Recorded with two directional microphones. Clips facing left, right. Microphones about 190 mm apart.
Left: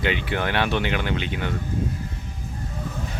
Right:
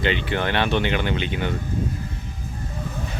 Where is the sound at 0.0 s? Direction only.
10° left (ahead or behind).